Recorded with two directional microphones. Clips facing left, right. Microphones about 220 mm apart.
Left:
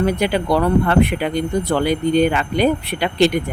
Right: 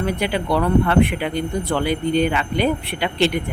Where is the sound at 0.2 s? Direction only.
40° left (ahead or behind).